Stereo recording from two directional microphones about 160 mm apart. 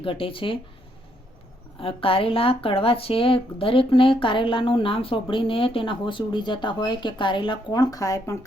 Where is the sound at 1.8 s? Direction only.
35° left (ahead or behind).